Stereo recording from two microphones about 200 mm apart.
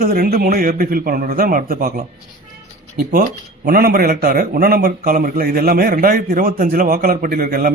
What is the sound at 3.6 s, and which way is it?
A man's voice, 45° right (ahead or behind).